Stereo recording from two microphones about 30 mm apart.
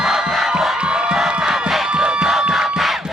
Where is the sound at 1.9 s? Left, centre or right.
Right.